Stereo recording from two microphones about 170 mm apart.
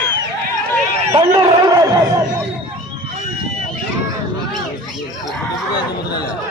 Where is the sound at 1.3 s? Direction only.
20° right (ahead or behind).